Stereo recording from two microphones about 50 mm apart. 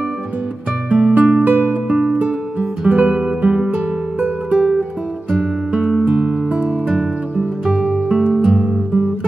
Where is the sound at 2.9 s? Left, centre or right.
Right.